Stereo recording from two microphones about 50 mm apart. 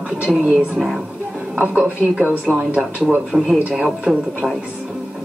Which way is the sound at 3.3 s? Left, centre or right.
Centre.